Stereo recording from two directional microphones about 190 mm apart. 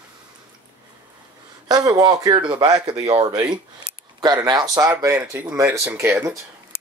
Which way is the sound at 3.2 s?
20° right (ahead or behind).